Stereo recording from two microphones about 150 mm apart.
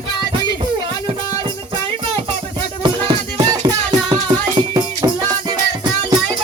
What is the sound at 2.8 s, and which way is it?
Music, 35° right (ahead or behind).